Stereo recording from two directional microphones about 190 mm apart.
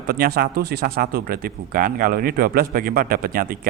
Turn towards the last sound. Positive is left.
turn(degrees=-50)  # may be behind; listen again after turning